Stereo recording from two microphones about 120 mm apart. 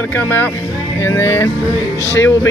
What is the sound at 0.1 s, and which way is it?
Speech, 15° left (ahead or behind).